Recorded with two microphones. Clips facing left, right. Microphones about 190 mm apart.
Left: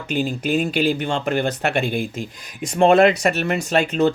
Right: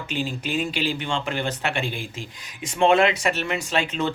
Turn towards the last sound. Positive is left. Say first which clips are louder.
# left 7 dB
turn(degrees=40)  # may be behind; listen again after turning